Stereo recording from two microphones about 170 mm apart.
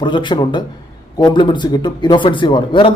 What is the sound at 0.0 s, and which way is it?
A man's voice, 25° left (ahead or behind).